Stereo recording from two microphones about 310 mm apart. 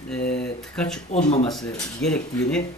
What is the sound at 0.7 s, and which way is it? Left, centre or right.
Speech, centre.